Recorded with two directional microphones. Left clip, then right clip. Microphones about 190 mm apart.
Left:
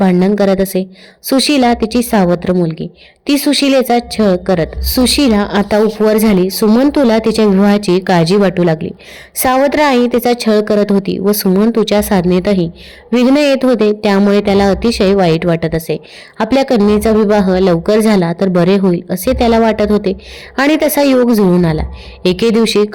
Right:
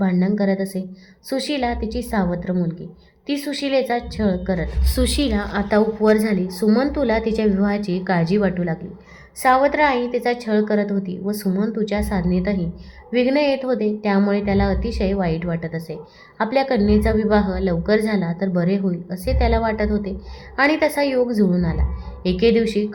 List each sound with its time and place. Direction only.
0.0 s a woman's voice: 40° left (ahead or behind)